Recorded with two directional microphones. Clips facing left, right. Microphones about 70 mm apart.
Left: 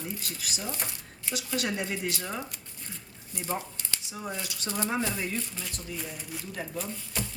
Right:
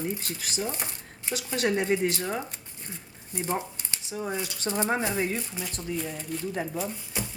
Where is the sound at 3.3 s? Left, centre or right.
Right.